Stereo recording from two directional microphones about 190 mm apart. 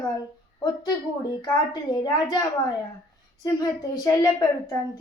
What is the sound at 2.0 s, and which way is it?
A child's voice, 20° left (ahead or behind).